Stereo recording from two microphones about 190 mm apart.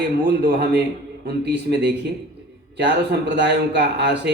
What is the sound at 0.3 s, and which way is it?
Speech, 60° right (ahead or behind).